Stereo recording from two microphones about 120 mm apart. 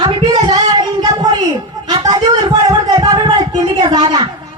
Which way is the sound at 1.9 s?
35° right (ahead or behind).